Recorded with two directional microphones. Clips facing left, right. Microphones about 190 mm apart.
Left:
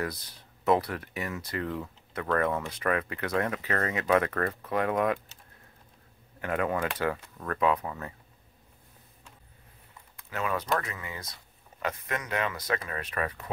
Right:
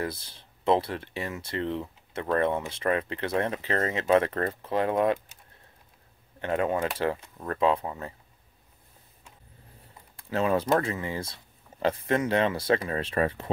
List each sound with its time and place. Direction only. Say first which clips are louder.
0.0 s speech: right 1 dB; 25° right (ahead or behind)
6.4 s speech: right 2 dB; 25° right (ahead or behind)
10.1 s speech: right 6 dB; 30° right (ahead or behind)